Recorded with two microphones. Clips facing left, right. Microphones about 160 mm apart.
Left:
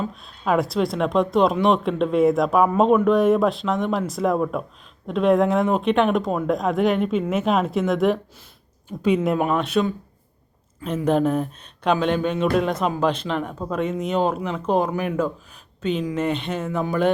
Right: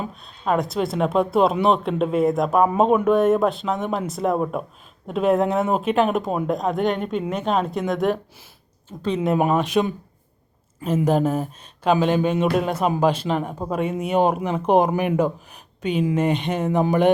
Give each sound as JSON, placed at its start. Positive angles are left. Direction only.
{"t": 0.1, "sound": "speech", "side_deg": 0}
{"t": 8.9, "sound": "speech", "side_deg": 10}
{"t": 9.2, "sound": "speech", "side_deg": -5}